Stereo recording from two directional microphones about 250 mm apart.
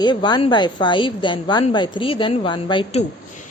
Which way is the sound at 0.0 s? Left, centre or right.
Centre.